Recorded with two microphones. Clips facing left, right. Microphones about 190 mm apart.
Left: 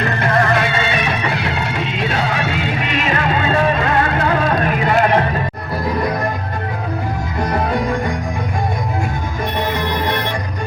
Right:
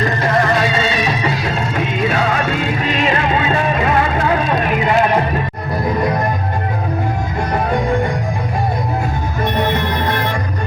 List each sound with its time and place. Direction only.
0.2 s music: 55° left (ahead or behind)